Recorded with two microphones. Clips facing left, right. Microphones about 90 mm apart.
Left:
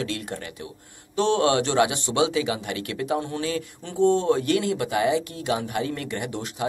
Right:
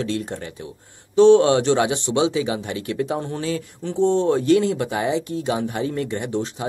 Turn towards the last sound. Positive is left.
turn(degrees=-30)  # may be behind; listen again after turning